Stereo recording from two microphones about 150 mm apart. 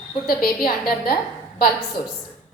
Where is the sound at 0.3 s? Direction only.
80° left.